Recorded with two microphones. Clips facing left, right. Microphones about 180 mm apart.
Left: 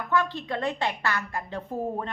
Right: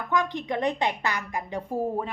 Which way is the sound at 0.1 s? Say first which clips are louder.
Even; 15° right (ahead or behind).